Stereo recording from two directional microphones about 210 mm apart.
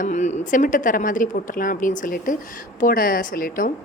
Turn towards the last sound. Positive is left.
turn(degrees=40)  # may be behind; listen again after turning